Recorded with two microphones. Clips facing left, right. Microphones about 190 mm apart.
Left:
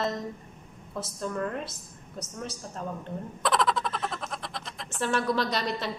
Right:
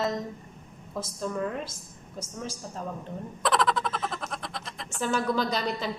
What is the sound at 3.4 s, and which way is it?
A woman's voice, centre (ahead or behind).